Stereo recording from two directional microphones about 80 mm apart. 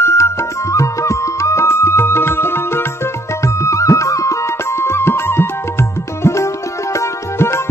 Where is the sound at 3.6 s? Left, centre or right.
Left.